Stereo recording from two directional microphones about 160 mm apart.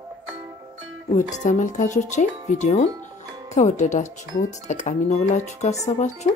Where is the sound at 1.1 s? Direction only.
50° left (ahead or behind).